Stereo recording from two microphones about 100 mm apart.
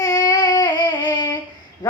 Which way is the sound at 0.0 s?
40° left (ahead or behind).